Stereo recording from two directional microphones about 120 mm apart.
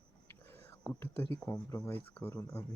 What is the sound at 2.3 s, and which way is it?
Speech, 25° left (ahead or behind).